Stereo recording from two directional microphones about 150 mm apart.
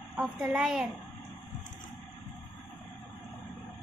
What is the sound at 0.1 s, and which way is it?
Speech, 5° right (ahead or behind).